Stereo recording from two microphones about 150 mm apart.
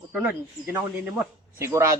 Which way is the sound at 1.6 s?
20° right (ahead or behind).